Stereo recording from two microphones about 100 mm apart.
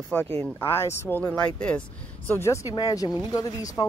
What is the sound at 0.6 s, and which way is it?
Speech, 25° left (ahead or behind).